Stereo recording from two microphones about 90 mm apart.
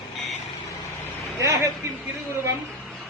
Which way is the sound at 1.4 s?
35° right (ahead or behind).